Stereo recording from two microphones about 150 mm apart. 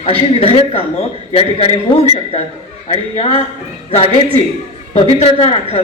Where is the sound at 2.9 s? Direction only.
40° left (ahead or behind).